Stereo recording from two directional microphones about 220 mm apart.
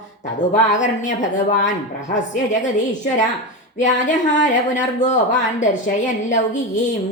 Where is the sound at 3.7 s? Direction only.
35° left (ahead or behind).